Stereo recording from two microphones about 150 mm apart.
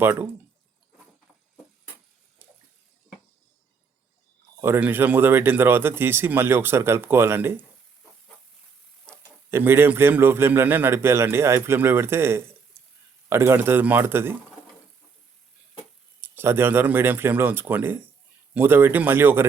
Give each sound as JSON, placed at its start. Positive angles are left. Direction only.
{"t": 0.0, "sound": "a man's voice", "side_deg": -15}
{"t": 4.6, "sound": "a man's voice", "side_deg": -15}
{"t": 9.5, "sound": "a man's voice", "side_deg": -15}
{"t": 16.2, "sound": "a man's voice", "side_deg": -15}